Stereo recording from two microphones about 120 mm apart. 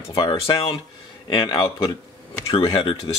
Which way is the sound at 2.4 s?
50° left (ahead or behind).